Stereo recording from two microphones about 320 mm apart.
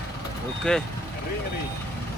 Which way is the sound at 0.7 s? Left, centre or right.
Centre.